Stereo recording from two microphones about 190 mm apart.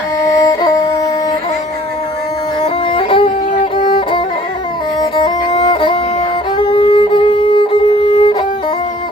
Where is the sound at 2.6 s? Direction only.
25° left (ahead or behind).